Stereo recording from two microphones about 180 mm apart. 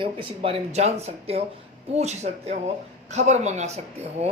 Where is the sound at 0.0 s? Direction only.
30° right (ahead or behind).